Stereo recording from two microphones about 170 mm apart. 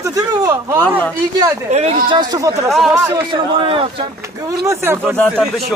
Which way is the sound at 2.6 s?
Centre (ahead or behind).